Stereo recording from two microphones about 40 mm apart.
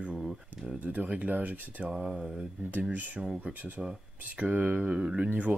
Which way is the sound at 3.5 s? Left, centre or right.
Right.